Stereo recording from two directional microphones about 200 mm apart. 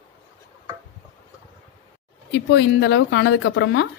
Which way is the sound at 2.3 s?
60° left (ahead or behind).